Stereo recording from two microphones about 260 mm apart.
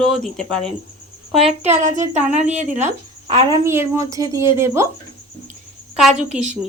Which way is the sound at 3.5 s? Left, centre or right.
Centre.